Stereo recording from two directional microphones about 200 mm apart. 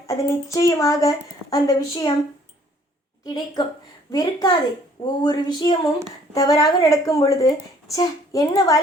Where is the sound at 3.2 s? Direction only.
20° left (ahead or behind).